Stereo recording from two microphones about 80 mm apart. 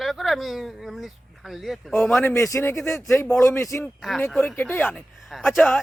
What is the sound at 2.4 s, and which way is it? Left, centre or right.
A man's voice, left.